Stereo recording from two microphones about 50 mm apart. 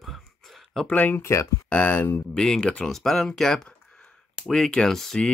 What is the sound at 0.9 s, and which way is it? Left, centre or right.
Speech, left.